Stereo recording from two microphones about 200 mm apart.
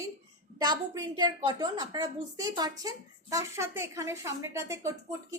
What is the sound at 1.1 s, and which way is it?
A woman's voice, 20° right (ahead or behind).